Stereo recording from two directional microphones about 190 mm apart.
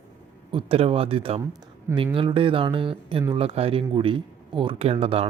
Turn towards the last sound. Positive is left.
turn(degrees=-30)  # may be behind; listen again after turning